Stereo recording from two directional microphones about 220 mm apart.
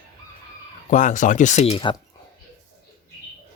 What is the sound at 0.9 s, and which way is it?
Speech, 35° left (ahead or behind).